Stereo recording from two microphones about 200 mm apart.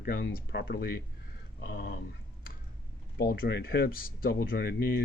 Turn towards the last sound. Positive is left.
turn(degrees=55)  # may be behind; listen again after turning